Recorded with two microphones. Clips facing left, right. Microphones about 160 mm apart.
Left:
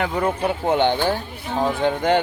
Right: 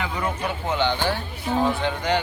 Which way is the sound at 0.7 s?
55° left (ahead or behind).